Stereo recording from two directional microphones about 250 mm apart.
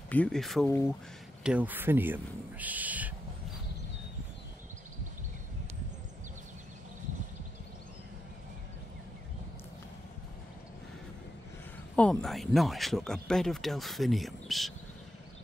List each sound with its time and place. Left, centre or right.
0.1 s speech: centre
11.9 s speech: centre